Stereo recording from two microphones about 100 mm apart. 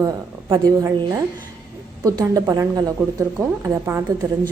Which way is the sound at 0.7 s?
40° right (ahead or behind).